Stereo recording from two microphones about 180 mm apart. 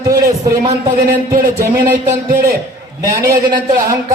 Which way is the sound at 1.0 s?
50° right (ahead or behind).